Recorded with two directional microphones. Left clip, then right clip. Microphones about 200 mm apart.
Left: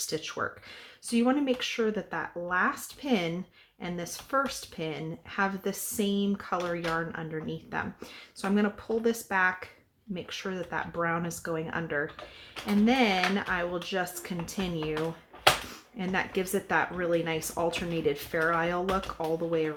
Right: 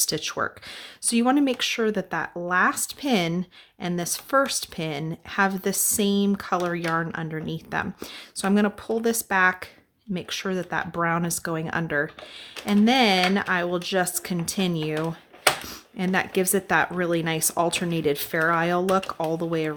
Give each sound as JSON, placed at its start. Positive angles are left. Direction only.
{"t": 0.0, "sound": "speech", "side_deg": -45}
{"t": 16.0, "sound": "speech", "side_deg": -45}